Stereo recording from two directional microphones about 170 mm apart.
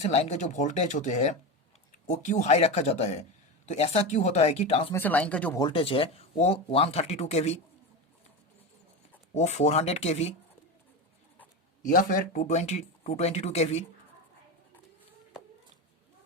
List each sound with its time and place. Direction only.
0.0 s speech: 40° left (ahead or behind)
4.9 s speech: 10° left (ahead or behind)
5.5 s speech: 30° left (ahead or behind)
9.3 s speech: 40° left (ahead or behind)
11.8 s speech: 50° left (ahead or behind)